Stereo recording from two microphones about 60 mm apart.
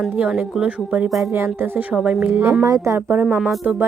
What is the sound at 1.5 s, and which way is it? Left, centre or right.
Speech, right.